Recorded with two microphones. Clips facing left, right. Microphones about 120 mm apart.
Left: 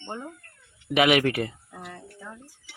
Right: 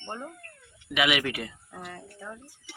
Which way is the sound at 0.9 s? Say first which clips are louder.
Left 6 dB; 40° left (ahead or behind).